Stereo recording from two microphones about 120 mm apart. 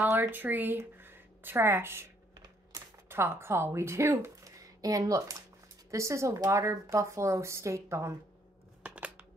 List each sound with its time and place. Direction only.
0.0 s speech: 15° right (ahead or behind)
2.3 s typing: 35° right (ahead or behind)
3.1 s a woman's voice: 20° right (ahead or behind)
8.8 s scissors: 10° right (ahead or behind)